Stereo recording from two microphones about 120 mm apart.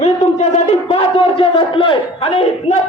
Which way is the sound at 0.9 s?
50° left (ahead or behind).